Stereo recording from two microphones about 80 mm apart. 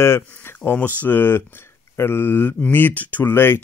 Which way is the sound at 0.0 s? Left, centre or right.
Left.